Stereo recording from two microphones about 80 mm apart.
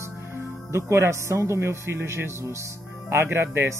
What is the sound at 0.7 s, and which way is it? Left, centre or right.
Speech, right.